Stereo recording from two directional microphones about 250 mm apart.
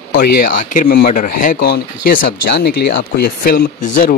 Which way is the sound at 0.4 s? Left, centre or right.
Left.